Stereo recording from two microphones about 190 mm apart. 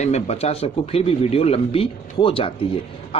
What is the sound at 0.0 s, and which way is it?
Speech, 35° left (ahead or behind).